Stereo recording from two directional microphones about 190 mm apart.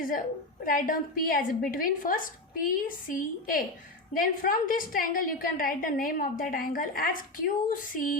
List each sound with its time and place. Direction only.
0.6 s a woman's voice: 45° left (ahead or behind)